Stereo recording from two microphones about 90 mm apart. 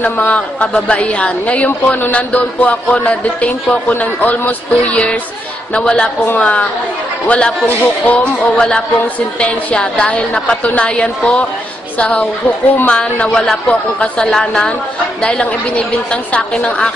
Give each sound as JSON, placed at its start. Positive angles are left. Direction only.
{"t": 0.0, "sound": "a woman's voice", "side_deg": 15}